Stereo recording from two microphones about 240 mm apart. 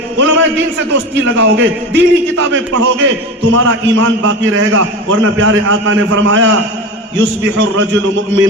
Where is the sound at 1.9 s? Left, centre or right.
Right.